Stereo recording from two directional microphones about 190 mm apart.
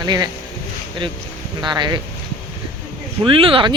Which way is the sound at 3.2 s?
30° right (ahead or behind).